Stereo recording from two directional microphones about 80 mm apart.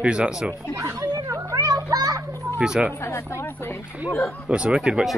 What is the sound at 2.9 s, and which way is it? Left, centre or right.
Speech, left.